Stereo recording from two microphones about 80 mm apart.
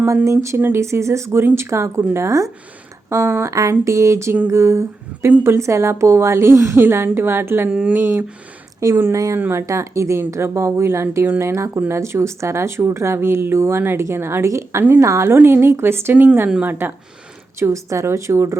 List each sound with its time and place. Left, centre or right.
0.3 s speech: right
7.7 s speech: centre
7.9 s speech: right
8.8 s speech: right
9.4 s speech: right
15.4 s speech: right
17.6 s speech: right